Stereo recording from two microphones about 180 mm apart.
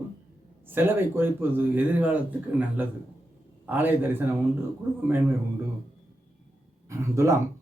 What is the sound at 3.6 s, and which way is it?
Speech, 10° right (ahead or behind).